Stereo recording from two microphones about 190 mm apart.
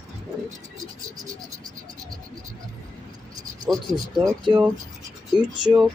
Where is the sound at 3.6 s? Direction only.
20° right (ahead or behind).